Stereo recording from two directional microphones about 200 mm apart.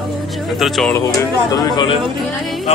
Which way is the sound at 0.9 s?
15° left (ahead or behind).